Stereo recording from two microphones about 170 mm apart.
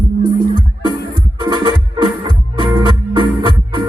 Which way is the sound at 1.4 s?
25° right (ahead or behind).